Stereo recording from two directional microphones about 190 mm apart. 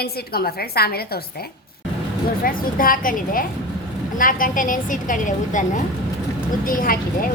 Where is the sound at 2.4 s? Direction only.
50° left (ahead or behind).